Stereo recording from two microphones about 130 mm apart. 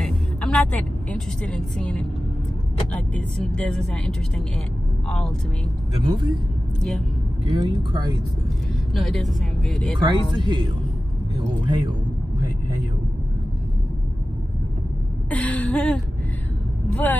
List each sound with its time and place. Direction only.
0.0 s a woman's voice: 5° left (ahead or behind)
7.4 s speech: 30° right (ahead or behind)
8.9 s speech: centre (ahead or behind)
9.9 s speech: 35° right (ahead or behind)
15.2 s a sound: 10° left (ahead or behind)
16.9 s speech: 15° left (ahead or behind)